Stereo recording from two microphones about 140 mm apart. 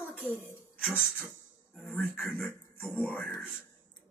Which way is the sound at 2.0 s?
15° left (ahead or behind).